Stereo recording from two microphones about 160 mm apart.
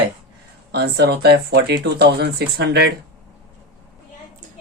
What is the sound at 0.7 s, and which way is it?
Speech, 90° right.